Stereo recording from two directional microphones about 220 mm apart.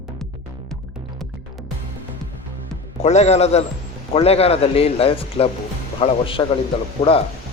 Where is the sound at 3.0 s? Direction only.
30° left (ahead or behind).